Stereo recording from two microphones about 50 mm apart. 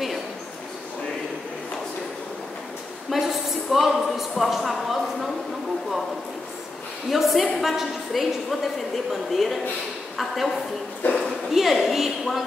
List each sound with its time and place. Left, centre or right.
3.1 s a sound: centre
7.1 s a woman's voice: centre
11.0 s speech: left
11.5 s a woman's voice: centre